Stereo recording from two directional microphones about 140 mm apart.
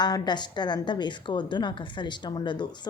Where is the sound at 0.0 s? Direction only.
30° left (ahead or behind).